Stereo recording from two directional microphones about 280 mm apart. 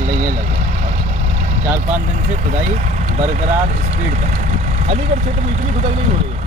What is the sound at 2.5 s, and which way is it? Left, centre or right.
Speech, right.